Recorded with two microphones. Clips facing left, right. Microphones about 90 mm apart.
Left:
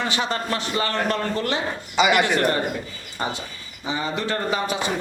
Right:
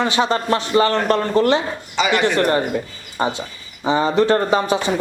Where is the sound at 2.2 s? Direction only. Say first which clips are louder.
Right 4 dB; 30° right (ahead or behind).